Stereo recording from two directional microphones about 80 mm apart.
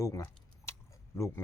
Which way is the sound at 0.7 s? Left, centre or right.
Left.